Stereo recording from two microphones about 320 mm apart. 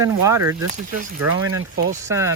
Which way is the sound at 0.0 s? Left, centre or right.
Centre.